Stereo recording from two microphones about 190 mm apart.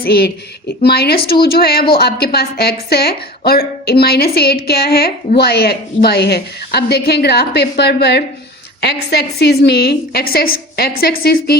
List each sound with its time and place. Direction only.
0.0 s a woman's voice: 55° left (ahead or behind)